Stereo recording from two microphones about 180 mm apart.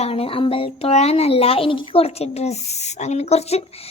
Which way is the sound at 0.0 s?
35° left (ahead or behind).